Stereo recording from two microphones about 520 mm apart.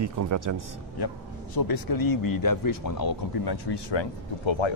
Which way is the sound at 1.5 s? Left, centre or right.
Left.